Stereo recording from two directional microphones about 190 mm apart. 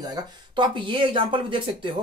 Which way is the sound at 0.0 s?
20° right (ahead or behind).